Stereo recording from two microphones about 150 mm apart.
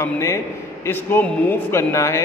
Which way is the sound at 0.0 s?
20° left (ahead or behind).